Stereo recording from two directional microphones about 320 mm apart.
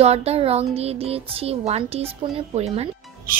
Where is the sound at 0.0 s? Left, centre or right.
Centre.